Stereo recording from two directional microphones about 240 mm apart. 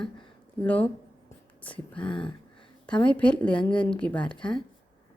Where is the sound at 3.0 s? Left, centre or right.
Centre.